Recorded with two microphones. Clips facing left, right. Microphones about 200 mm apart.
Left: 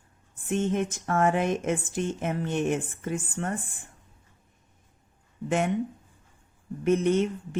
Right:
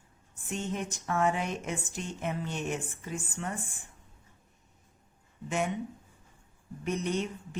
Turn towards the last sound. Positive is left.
turn(degrees=55)  # may be behind; listen again after turning